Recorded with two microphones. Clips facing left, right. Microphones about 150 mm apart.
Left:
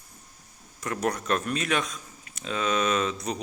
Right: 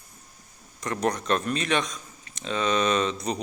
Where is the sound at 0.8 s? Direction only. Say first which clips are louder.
Right 2 dB; 5° left (ahead or behind).